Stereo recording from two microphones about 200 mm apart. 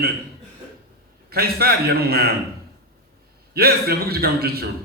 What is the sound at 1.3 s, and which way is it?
A man's voice, 50° right (ahead or behind).